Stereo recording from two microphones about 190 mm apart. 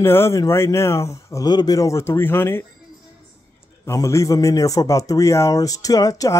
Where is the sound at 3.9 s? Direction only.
15° left (ahead or behind).